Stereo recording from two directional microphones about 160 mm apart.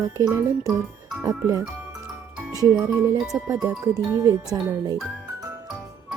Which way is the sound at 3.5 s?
20° right (ahead or behind).